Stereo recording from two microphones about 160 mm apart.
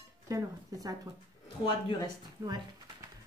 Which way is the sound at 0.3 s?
20° right (ahead or behind).